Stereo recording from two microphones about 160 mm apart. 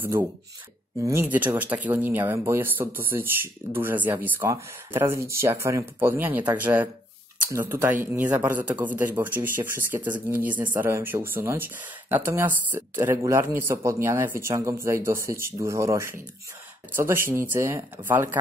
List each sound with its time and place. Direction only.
0.0 s speech: 10° right (ahead or behind)
1.3 s speech: 10° right (ahead or behind)